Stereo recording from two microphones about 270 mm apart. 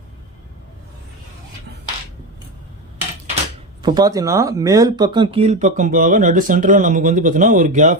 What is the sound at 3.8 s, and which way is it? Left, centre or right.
Speech, centre.